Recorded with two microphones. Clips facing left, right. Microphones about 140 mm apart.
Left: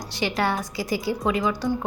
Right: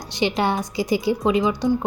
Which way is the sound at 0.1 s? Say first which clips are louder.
Right 4 dB; 20° right (ahead or behind).